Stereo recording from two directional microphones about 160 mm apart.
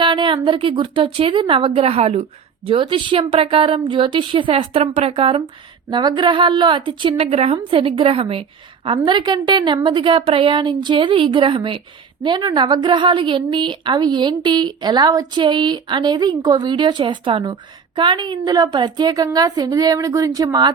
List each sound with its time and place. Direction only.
0.0 s a woman's voice: 30° right (ahead or behind)